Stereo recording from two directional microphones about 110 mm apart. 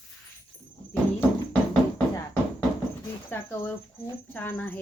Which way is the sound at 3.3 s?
20° left (ahead or behind).